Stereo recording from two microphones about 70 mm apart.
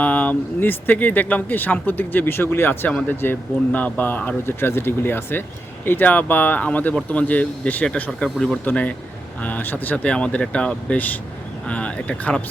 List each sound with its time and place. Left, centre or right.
0.0 s speech: left
4.4 s speech: left; by 12.4 s centre